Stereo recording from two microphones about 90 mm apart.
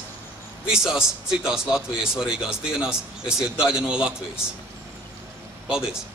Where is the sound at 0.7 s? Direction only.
10° right (ahead or behind).